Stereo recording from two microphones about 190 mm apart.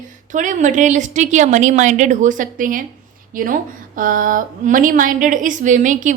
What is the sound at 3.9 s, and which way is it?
A woman's voice, 45° right (ahead or behind).